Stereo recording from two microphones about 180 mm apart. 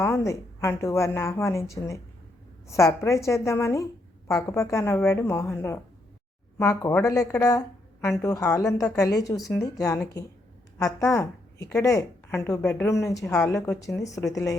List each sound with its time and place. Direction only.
0.0 s a woman's voice: 15° left (ahead or behind)
9.4 s a woman's voice: 10° left (ahead or behind)